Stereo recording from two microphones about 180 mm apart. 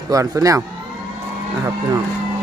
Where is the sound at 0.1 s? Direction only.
20° right (ahead or behind).